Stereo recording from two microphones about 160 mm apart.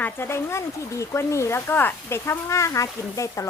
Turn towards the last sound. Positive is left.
turn(degrees=20)  # may be behind; listen again after turning